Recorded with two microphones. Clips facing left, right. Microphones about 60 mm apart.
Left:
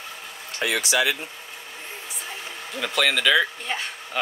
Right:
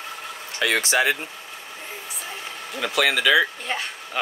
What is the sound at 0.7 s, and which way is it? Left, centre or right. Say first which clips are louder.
Speech: right 2 dB; right.